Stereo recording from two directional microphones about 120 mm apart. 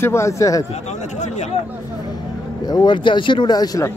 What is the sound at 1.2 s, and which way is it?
Speech, 70° left (ahead or behind).